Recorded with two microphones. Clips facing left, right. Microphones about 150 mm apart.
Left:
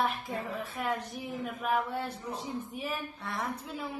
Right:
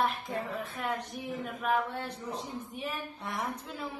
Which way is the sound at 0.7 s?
Centre (ahead or behind).